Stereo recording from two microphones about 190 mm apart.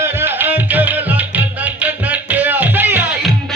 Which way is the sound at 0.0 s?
10° right (ahead or behind).